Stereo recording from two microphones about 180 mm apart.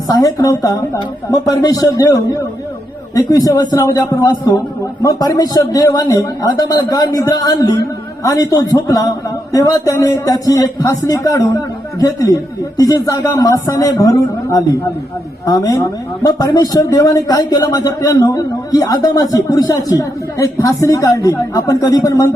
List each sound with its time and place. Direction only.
0.1 s speech: 20° left (ahead or behind)
3.2 s speech: 20° left (ahead or behind)